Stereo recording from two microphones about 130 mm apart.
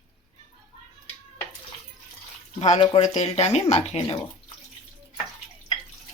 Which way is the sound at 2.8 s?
55° left (ahead or behind).